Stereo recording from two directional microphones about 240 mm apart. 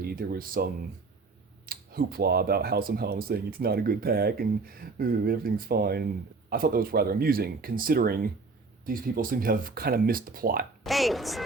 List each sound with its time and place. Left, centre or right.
0.0 s speech: right
10.8 s speech: centre